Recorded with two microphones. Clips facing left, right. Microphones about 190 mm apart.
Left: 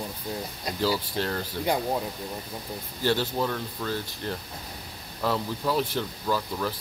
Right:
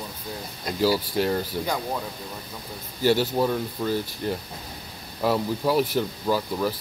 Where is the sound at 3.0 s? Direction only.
10° right (ahead or behind).